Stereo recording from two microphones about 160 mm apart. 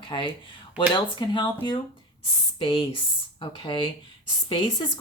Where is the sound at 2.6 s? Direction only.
35° left (ahead or behind).